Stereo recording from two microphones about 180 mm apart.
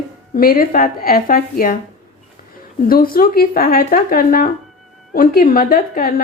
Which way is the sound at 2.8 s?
55° left (ahead or behind).